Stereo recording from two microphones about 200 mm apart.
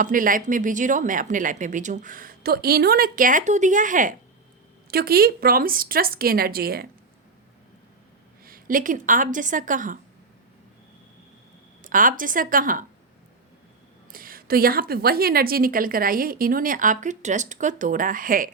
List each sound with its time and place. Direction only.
0.0 s a woman's voice: 40° right (ahead or behind)
8.4 s speech: 45° right (ahead or behind)
11.8 s a woman's voice: 40° right (ahead or behind)
14.1 s a woman's voice: 45° right (ahead or behind)